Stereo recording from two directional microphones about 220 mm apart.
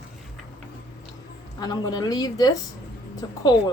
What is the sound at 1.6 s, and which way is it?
A woman's voice, 20° left (ahead or behind).